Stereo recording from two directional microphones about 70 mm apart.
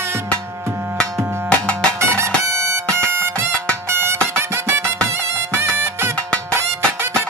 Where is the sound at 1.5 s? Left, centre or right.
Centre.